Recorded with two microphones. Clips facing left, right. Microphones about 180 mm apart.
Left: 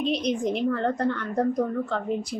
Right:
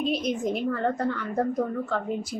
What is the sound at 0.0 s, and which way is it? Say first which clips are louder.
Speech: left 1 dB; centre (ahead or behind).